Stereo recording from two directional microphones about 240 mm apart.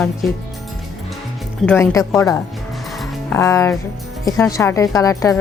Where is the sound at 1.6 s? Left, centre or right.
Centre.